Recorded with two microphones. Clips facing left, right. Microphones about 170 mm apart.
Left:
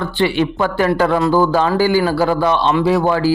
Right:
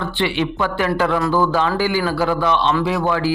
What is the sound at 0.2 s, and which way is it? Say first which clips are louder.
Speech: left 4 dB; 45° left (ahead or behind).